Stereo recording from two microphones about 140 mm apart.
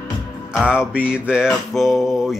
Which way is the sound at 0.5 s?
5° right (ahead or behind).